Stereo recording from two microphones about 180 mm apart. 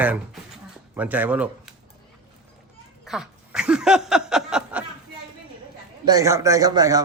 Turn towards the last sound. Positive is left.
turn(degrees=-20)  # may be behind; listen again after turning